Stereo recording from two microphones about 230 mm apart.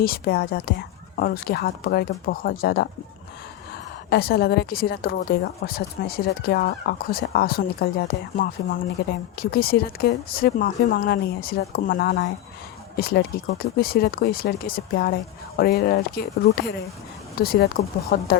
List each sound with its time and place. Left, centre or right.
0.0 s speech: left
4.1 s speech: left